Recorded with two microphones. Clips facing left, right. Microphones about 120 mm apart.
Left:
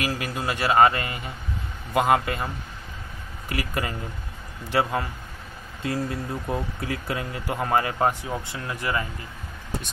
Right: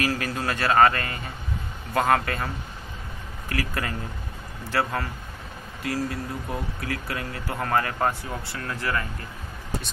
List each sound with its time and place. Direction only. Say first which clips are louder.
0.0 s speech: right 1 dB; 10° left (ahead or behind)